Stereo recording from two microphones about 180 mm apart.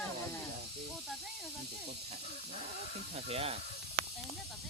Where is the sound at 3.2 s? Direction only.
35° right (ahead or behind).